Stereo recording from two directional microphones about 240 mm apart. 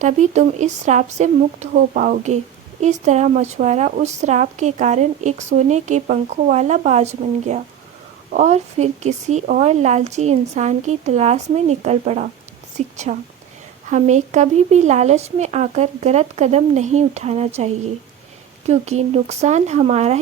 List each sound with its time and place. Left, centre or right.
0.0 s speech: right
18.7 s speech: right